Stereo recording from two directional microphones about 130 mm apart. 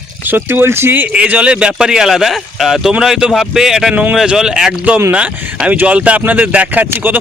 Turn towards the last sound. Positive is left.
turn(degrees=-15)  # may be behind; listen again after turning